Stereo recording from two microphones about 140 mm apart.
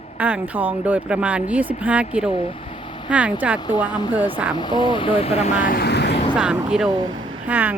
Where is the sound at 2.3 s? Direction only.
40° left (ahead or behind).